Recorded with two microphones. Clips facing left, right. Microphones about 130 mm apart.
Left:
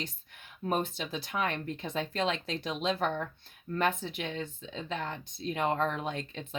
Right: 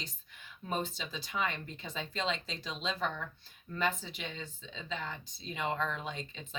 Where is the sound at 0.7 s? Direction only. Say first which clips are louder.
Left 5 dB; 55° left (ahead or behind).